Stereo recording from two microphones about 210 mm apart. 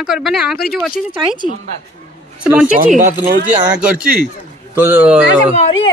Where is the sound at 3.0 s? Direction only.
40° right (ahead or behind).